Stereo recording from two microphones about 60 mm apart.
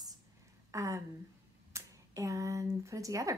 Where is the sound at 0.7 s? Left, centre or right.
Right.